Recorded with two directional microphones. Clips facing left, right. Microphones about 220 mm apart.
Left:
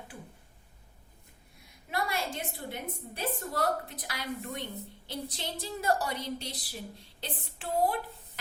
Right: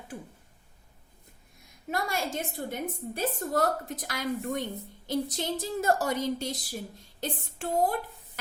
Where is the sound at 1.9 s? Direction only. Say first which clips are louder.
Right 2 dB; 45° right (ahead or behind).